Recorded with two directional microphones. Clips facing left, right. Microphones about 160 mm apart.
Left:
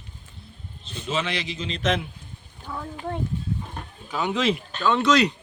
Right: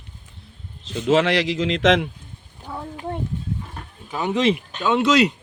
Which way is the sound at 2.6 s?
20° right (ahead or behind).